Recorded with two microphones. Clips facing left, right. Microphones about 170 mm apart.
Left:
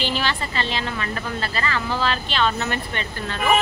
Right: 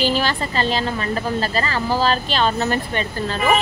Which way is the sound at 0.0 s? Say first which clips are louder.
Right 5 dB; 40° right (ahead or behind).